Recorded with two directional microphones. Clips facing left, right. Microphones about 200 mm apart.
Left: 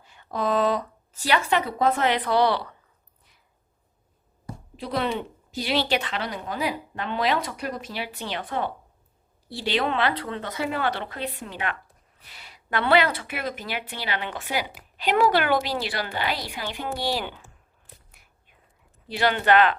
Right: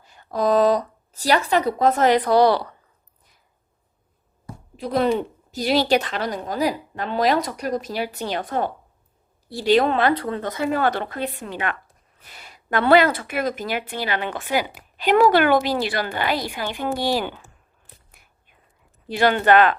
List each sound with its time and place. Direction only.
0.0 s speech: 40° right (ahead or behind)
4.9 s a woman's voice: 40° right (ahead or behind)
18.2 s whispering: 50° right (ahead or behind)
19.0 s speech: 50° right (ahead or behind)